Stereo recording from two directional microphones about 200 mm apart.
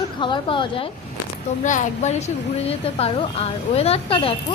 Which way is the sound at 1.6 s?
35° left (ahead or behind).